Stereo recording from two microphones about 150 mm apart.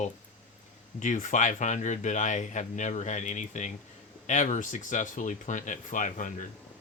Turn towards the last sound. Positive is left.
turn(degrees=60)  # may be behind; listen again after turning